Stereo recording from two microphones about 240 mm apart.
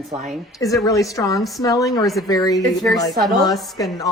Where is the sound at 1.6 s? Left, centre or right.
Centre.